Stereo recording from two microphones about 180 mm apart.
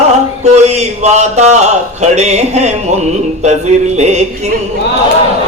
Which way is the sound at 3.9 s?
40° right (ahead or behind).